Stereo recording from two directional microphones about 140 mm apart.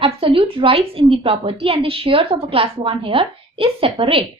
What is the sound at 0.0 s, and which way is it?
A woman's voice, 40° right (ahead or behind).